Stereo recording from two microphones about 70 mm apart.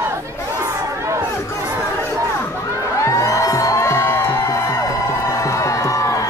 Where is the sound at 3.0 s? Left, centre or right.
Left.